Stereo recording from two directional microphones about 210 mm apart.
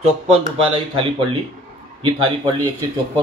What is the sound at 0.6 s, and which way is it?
Speech, 25° right (ahead or behind).